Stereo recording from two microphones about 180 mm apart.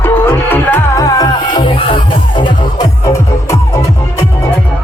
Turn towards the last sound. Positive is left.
turn(degrees=15)  # may be behind; listen again after turning